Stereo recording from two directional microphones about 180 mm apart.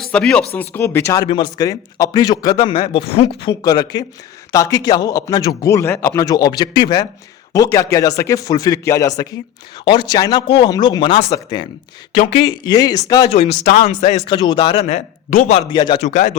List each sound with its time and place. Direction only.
0.0 s speech: 5° left (ahead or behind); by 3.5 s 30° left (ahead or behind)
3.6 s speech: 20° left (ahead or behind)
13.5 s speech: 65° left (ahead or behind)
13.8 s speech: 40° left (ahead or behind)
14.3 s speech: 25° left (ahead or behind); by 15.4 s 45° left (ahead or behind)
15.4 s speech: 30° left (ahead or behind)
16.0 s speech: 40° left (ahead or behind)